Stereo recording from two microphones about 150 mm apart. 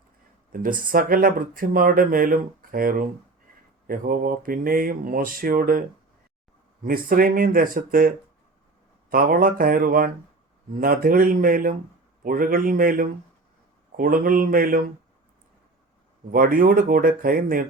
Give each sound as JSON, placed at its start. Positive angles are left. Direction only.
{"t": 0.5, "sound": "speech", "side_deg": -65}
{"t": 6.8, "sound": "speech", "side_deg": -75}
{"t": 16.3, "sound": "speech", "side_deg": -65}